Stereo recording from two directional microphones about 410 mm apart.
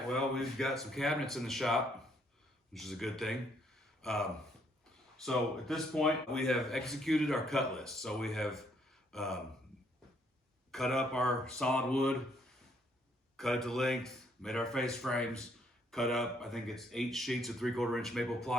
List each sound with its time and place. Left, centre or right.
0.1 s a man's voice: centre
10.7 s a man's voice: centre
13.3 s a man's voice: centre